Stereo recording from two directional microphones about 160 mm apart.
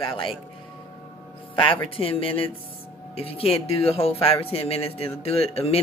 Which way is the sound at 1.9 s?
35° left (ahead or behind).